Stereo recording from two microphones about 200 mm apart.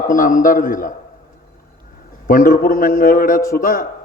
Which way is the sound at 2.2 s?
45° left (ahead or behind).